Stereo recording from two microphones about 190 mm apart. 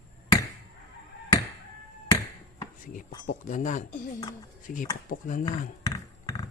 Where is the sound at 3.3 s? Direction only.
40° left (ahead or behind).